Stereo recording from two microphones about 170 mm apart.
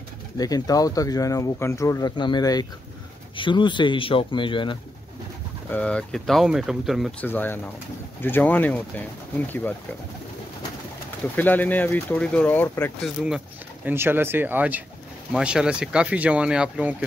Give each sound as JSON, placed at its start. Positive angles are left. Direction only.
{"t": 0.4, "sound": "speech", "side_deg": 20}
{"t": 5.7, "sound": "speech", "side_deg": 5}
{"t": 7.2, "sound": "speech", "side_deg": 10}
{"t": 11.3, "sound": "speech", "side_deg": 10}
{"t": 13.0, "sound": "speech", "side_deg": -5}